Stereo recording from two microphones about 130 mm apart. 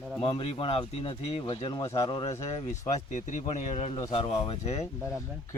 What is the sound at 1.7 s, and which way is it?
Speech, 35° left (ahead or behind).